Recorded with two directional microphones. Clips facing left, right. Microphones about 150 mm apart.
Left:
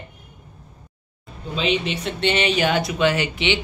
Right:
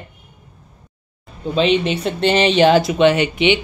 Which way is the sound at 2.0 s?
35° right (ahead or behind).